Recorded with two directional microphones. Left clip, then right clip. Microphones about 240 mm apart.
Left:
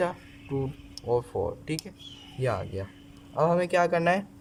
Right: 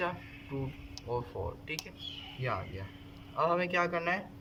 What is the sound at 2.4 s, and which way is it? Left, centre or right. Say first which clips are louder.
Speech: left 8 dB; left.